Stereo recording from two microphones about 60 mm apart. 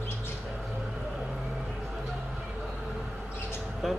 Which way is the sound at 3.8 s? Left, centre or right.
Centre.